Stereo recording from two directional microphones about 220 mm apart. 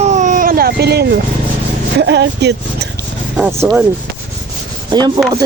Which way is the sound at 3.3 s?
5° right (ahead or behind).